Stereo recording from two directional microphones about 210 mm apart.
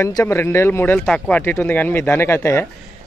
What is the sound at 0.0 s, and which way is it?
A man's voice, 15° left (ahead or behind).